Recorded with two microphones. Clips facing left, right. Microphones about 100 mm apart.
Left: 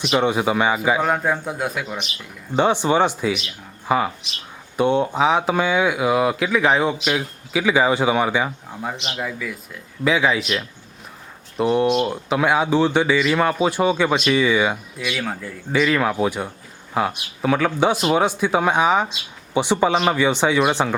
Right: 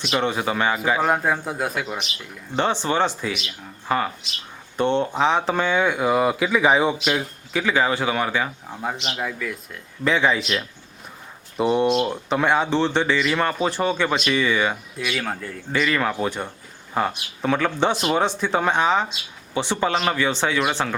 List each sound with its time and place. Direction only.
0.0 s a man's voice: 15° left (ahead or behind); by 2.0 s 5° right (ahead or behind)
2.6 s speech: 10° left (ahead or behind)
9.0 s a man's voice: 5° right (ahead or behind)
11.5 s a man's voice: centre (ahead or behind)
11.9 s speech: 10° left (ahead or behind)
14.9 s a man's voice: centre (ahead or behind); by 20.9 s 15° left (ahead or behind)